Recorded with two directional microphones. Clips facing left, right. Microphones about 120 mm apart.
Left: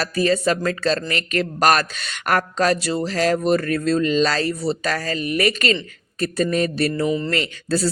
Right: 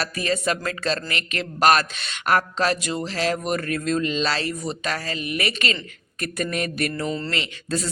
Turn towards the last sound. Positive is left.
turn(degrees=35)  # may be behind; listen again after turning